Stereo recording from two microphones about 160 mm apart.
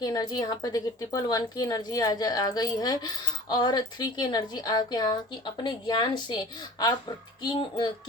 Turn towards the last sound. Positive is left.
turn(degrees=30)  # may be behind; listen again after turning